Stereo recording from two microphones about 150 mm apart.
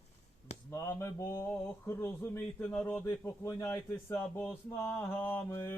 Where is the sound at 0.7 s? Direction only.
20° left (ahead or behind).